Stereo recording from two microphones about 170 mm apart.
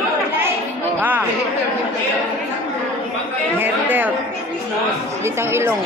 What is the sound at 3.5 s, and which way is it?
Chatter, 10° right (ahead or behind).